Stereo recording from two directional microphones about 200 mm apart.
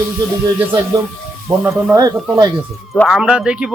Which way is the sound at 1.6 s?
15° right (ahead or behind).